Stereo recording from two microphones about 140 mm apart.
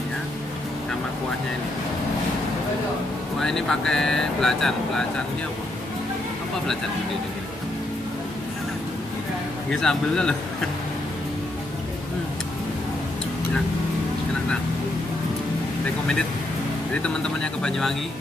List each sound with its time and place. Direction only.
3.3 s speech: 5° left (ahead or behind)
9.7 s speech: 5° left (ahead or behind)
16.9 s speech: 5° left (ahead or behind)